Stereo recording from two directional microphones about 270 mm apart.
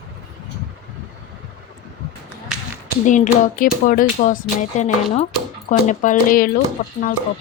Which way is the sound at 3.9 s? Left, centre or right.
Left.